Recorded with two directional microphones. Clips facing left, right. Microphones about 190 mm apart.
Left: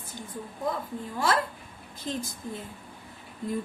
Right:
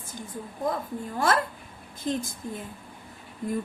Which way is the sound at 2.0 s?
50° right (ahead or behind).